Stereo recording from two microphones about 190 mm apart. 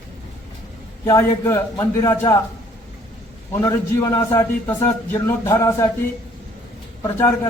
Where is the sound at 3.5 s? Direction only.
15° left (ahead or behind).